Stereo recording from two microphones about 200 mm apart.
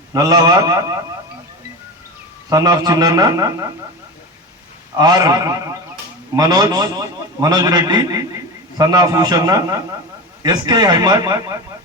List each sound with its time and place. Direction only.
0.1 s a man's voice: 20° right (ahead or behind)
2.5 s a man's voice: 20° right (ahead or behind)
4.9 s a man's voice: 20° right (ahead or behind)